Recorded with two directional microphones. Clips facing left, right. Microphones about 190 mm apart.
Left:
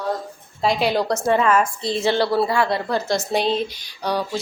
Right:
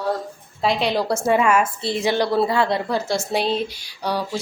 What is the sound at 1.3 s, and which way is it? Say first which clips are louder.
Speech: even; 10° right (ahead or behind).